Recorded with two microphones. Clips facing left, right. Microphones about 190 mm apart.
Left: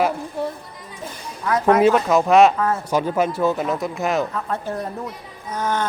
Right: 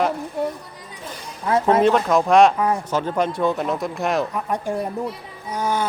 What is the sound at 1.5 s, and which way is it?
Speech, 25° right (ahead or behind).